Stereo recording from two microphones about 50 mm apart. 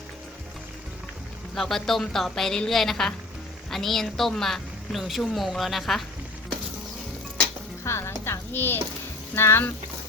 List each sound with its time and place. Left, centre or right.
1.5 s a woman's voice: centre
7.9 s stir: left
9.3 s speech: left